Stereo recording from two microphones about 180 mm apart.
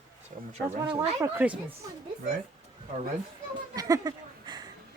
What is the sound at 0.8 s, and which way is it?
Speech, 20° right (ahead or behind).